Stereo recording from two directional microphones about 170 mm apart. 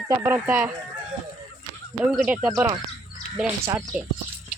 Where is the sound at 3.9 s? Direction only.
5° right (ahead or behind).